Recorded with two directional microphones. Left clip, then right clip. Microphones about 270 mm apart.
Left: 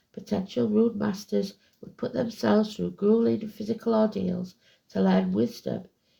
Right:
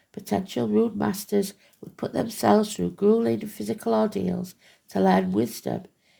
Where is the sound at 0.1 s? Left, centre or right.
Right.